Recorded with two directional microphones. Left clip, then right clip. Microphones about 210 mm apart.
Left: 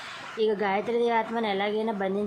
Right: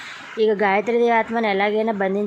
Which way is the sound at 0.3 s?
25° right (ahead or behind).